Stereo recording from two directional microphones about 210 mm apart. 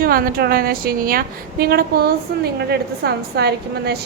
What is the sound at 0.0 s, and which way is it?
A woman's voice, 45° right (ahead or behind).